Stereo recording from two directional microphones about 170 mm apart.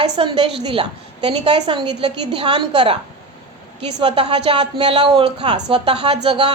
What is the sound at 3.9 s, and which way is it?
A woman's voice, 30° right (ahead or behind).